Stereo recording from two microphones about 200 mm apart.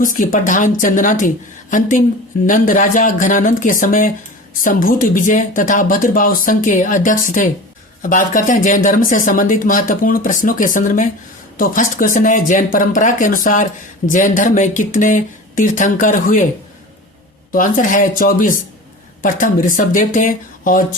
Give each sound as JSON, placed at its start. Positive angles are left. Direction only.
{"t": 0.0, "sound": "speech", "side_deg": 40}
{"t": 17.5, "sound": "speech", "side_deg": 40}